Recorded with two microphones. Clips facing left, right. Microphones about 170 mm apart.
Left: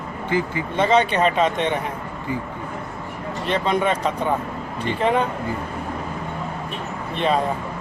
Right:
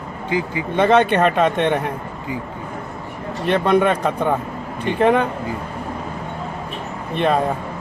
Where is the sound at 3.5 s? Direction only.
60° right (ahead or behind).